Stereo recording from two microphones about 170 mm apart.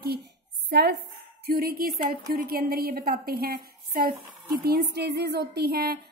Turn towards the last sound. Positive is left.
turn(degrees=-70)  # may be behind; listen again after turning